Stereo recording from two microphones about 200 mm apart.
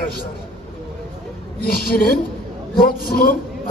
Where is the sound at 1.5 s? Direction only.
50° left (ahead or behind).